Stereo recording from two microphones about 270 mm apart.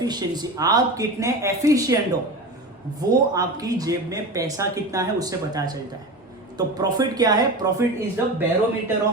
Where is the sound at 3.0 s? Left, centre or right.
Centre.